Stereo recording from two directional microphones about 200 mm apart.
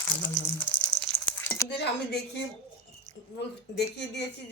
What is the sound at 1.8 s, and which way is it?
Speech, 55° left (ahead or behind).